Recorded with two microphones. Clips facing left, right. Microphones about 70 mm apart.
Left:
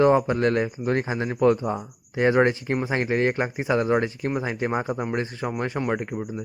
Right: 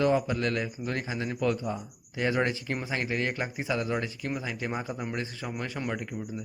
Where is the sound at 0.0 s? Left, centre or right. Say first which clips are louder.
Left 7 dB; left.